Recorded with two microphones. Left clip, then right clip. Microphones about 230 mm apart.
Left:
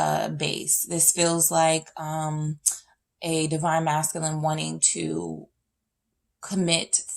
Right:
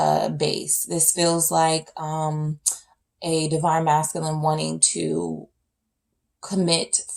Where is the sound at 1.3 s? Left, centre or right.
Left.